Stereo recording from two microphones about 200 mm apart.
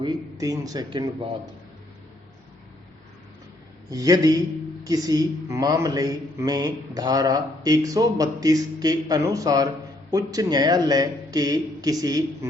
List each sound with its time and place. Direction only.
0.0 s speech: 15° right (ahead or behind)
3.8 s speech: 15° right (ahead or behind)